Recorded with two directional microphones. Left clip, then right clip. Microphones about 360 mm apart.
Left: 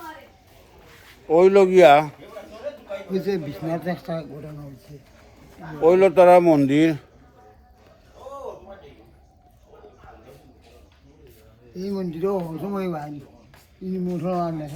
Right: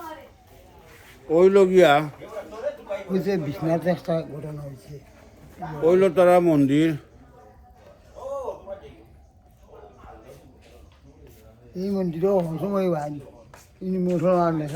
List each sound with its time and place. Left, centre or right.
1.3 s speech: centre
2.7 s a sound: right
3.1 s speech: right
5.8 s speech: centre
8.2 s a sound: right
11.7 s speech: right